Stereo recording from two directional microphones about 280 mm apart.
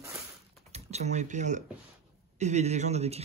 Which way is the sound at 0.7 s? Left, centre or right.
Right.